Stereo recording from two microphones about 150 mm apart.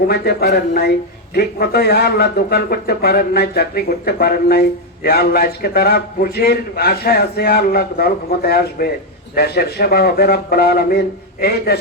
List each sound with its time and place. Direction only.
0.1 s a man's voice: 90° left